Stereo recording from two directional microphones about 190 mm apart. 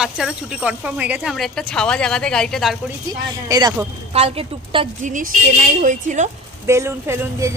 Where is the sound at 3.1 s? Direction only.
20° right (ahead or behind).